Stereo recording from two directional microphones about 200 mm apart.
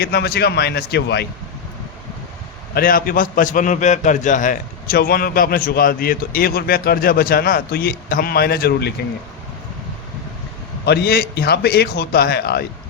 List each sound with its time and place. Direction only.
0.0 s a man's voice: 50° left (ahead or behind)
2.7 s a man's voice: 45° left (ahead or behind)
10.8 s a man's voice: 55° left (ahead or behind)